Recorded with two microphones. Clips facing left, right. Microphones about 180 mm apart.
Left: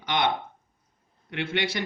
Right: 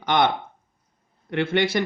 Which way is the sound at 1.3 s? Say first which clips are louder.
Right 7 dB; 50° right (ahead or behind).